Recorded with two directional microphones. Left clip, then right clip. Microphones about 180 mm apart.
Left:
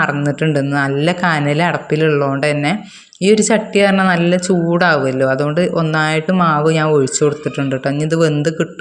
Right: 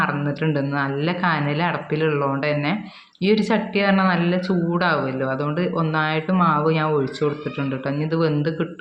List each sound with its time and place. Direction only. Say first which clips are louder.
0.0 s speech: left 6 dB; 40° left (ahead or behind)